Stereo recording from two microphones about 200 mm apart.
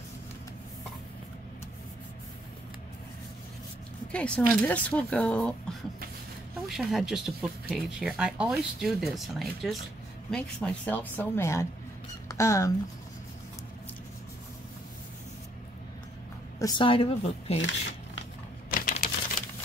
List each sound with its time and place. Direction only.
4.1 s speech: 5° left (ahead or behind)
16.5 s speech: 20° left (ahead or behind)
17.6 s a sound: 65° left (ahead or behind)
18.7 s typing: 45° left (ahead or behind)